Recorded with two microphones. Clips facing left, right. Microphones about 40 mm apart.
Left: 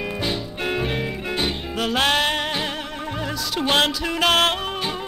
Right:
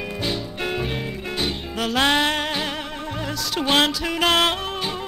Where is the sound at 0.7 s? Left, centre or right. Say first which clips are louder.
Left 2 dB; centre.